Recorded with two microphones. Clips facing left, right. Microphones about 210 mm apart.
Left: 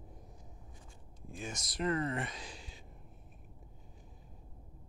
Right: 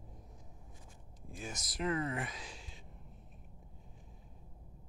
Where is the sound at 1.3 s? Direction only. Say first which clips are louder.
Left 2 dB; 5° right (ahead or behind).